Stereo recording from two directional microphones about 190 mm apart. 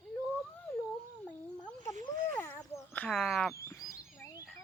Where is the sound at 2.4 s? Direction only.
10° left (ahead or behind).